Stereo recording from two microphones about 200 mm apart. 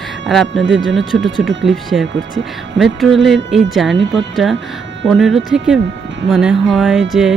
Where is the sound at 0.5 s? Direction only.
65° right (ahead or behind).